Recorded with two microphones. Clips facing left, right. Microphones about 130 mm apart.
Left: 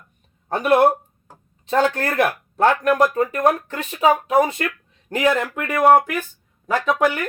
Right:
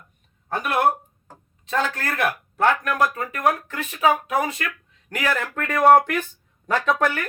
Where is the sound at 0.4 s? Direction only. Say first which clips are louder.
Left 6 dB; 30° left (ahead or behind).